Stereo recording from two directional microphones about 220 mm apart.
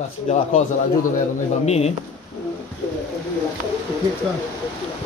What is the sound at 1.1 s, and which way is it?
Speech, 30° left (ahead or behind).